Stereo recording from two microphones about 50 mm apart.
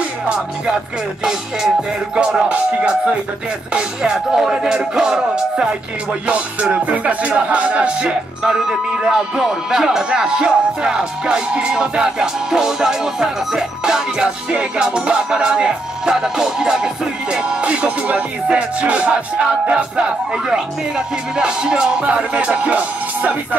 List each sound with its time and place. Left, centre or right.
1.2 s music: centre
20.4 s music: centre